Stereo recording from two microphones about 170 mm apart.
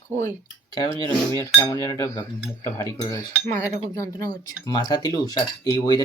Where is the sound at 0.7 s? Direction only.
25° left (ahead or behind).